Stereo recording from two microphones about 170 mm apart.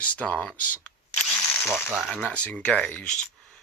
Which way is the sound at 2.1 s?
5° left (ahead or behind).